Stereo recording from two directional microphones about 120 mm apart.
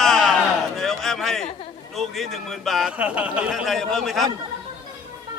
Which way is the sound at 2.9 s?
10° right (ahead or behind).